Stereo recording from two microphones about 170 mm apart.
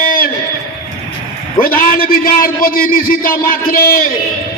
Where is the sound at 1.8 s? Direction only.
60° left (ahead or behind).